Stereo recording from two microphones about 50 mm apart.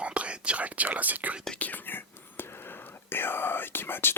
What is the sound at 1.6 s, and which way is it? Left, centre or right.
Speech, left.